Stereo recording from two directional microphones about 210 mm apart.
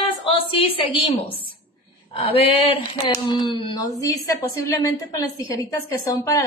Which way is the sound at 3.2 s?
20° left (ahead or behind).